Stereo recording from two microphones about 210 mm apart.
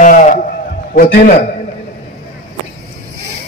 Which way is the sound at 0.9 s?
45° left (ahead or behind).